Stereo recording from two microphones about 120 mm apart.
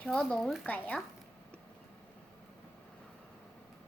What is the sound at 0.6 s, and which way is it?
Speech, 10° left (ahead or behind).